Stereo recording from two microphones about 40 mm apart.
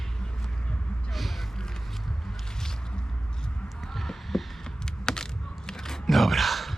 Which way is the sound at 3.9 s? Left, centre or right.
Centre.